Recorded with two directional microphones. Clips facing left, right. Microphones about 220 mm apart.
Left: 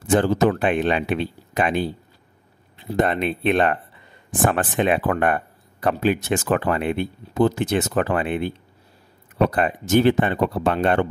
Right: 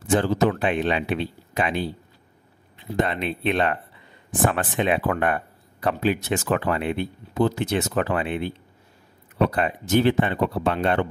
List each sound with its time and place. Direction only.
0.1 s speech: 50° left (ahead or behind)
3.0 s speech: 50° left (ahead or behind)